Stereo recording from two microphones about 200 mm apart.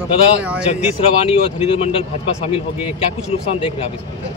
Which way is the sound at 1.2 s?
25° left (ahead or behind).